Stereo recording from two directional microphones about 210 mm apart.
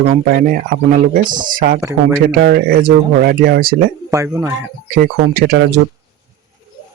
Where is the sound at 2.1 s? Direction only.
50° right (ahead or behind).